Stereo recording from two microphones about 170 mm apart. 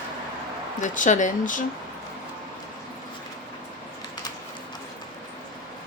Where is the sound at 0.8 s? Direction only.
45° left (ahead or behind).